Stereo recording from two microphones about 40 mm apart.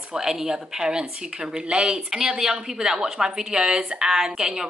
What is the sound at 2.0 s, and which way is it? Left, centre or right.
A woman's voice, centre.